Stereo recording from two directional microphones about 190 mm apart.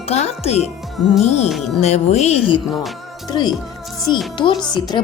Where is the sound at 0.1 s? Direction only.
35° left (ahead or behind).